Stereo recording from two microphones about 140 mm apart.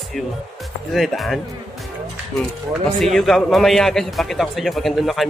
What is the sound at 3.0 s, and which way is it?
A man's voice, centre (ahead or behind).